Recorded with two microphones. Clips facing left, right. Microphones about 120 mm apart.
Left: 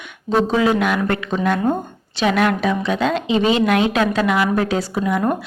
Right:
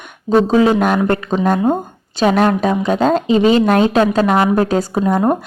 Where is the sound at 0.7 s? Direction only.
40° right (ahead or behind).